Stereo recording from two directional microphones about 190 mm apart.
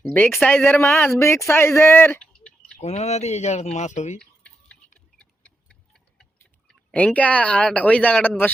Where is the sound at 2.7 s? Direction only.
35° left (ahead or behind).